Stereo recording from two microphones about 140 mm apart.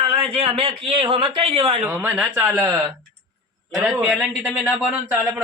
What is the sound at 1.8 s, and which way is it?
Speech, 10° right (ahead or behind).